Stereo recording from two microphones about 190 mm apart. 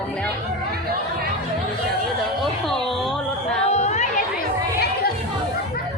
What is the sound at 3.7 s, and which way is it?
Chatter, 35° left (ahead or behind).